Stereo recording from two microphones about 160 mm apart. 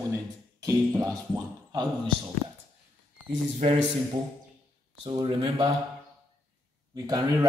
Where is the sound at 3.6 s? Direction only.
40° right (ahead or behind).